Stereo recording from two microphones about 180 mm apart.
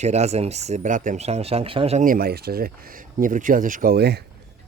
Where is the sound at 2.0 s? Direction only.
55° right (ahead or behind).